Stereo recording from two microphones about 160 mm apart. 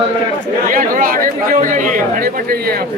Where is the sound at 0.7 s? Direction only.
60° right (ahead or behind).